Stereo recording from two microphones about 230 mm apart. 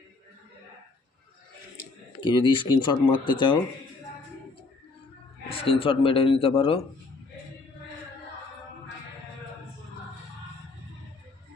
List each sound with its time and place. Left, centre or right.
2.2 s speech: left
5.5 s speech: left